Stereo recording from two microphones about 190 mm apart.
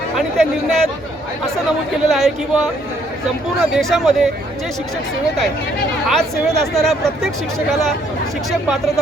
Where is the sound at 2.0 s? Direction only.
Centre (ahead or behind).